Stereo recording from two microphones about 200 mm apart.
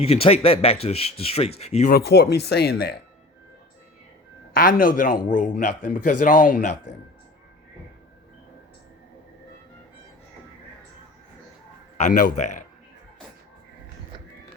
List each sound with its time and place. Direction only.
0.0 s a man's voice: 30° left (ahead or behind)
1.9 s speech: 50° left (ahead or behind)
4.5 s a man's voice: 45° left (ahead or behind)
11.9 s a man's voice: 40° left (ahead or behind)